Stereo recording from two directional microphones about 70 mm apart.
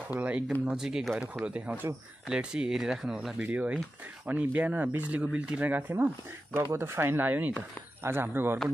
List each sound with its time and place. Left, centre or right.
0.1 s speech: right
0.7 s speech: centre
1.4 s speech: centre
2.2 s speech: centre
3.4 s speech: right